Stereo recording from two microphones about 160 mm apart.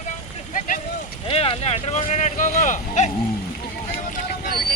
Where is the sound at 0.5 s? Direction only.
55° left (ahead or behind).